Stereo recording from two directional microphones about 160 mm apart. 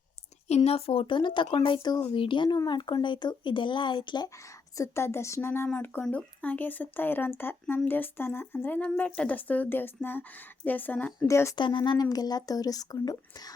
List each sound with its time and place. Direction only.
0.4 s speech: 40° left (ahead or behind)
4.8 s speech: 15° left (ahead or behind)
11.6 s speech: 30° left (ahead or behind)